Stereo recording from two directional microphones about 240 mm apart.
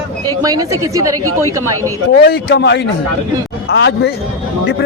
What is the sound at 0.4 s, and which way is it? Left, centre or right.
Speech, centre.